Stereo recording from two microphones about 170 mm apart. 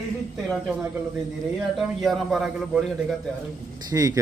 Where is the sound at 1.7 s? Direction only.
Centre (ahead or behind).